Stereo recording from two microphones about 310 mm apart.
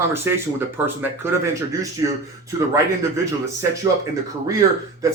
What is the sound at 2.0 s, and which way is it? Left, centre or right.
Speech, centre.